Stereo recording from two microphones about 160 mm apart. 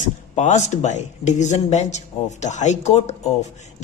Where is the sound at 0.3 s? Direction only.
45° left (ahead or behind).